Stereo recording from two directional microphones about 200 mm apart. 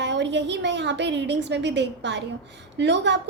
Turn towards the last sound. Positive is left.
turn(degrees=-60)  # may be behind; listen again after turning